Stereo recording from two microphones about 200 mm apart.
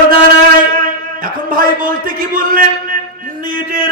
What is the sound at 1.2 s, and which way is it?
A man's voice, 40° right (ahead or behind).